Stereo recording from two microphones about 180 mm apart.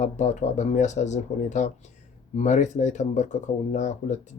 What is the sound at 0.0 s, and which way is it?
Speech, 40° left (ahead or behind).